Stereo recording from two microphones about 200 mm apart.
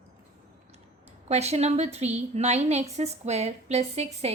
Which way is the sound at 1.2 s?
30° right (ahead or behind).